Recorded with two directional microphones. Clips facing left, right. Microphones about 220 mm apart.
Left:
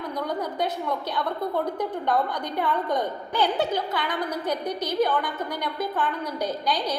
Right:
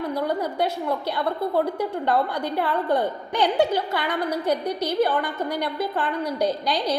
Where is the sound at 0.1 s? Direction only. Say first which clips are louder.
Right 4 dB; 10° right (ahead or behind).